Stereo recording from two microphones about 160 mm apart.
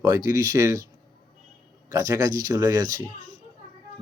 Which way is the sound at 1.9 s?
20° right (ahead or behind).